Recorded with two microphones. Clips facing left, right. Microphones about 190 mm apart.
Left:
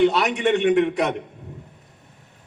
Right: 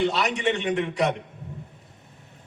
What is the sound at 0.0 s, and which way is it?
A man's voice, 60° left (ahead or behind).